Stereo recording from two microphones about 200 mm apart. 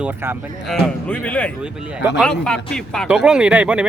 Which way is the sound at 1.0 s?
5° left (ahead or behind).